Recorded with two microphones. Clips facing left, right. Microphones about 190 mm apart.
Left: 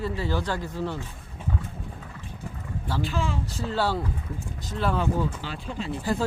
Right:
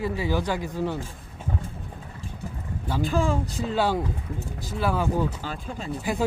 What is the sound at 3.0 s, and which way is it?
Speech, 45° right (ahead or behind).